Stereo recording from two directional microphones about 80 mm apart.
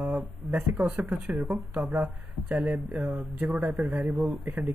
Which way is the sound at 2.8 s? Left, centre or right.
Centre.